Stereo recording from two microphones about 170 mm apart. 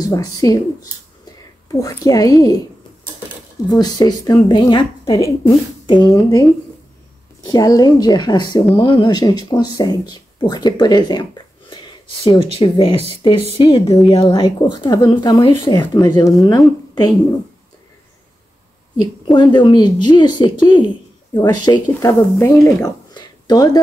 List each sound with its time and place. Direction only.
0.0 s speech: 20° left (ahead or behind)
3.6 s speech: 25° left (ahead or behind)
7.4 s speech: 20° left (ahead or behind)
11.7 s a sound: 30° left (ahead or behind)
12.6 s speech: 30° left (ahead or behind)
19.3 s speech: 25° left (ahead or behind)